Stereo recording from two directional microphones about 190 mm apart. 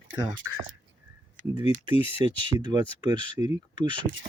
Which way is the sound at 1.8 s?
25° right (ahead or behind).